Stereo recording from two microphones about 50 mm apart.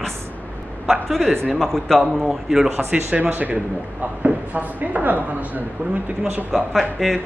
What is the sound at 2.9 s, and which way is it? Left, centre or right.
A woman's voice, right.